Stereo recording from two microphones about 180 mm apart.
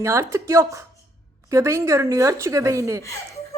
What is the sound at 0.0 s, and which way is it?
A woman's voice, 15° right (ahead or behind).